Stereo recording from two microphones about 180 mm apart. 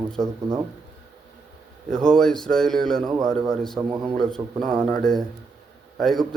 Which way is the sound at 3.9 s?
20° right (ahead or behind).